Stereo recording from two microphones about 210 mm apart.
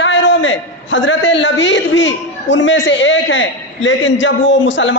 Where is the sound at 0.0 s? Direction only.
60° left (ahead or behind).